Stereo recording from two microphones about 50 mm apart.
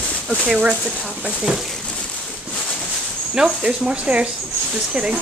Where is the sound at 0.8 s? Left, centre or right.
Centre.